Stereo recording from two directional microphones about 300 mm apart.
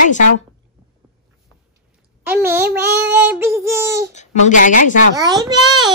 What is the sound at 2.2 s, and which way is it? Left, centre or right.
Speech, centre.